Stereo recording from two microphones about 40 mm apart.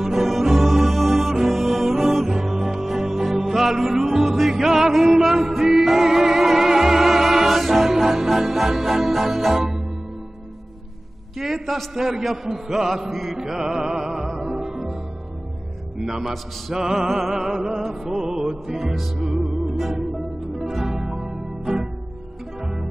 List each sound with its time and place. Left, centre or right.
0.0 s music: centre
11.3 s a man's voice: centre
13.4 s music: centre
16.0 s a man's voice: centre
16.7 s music: centre
18.8 s a man's voice: centre
20.5 s music: centre